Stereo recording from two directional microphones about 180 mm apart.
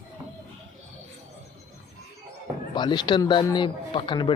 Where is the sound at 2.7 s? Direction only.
25° left (ahead or behind).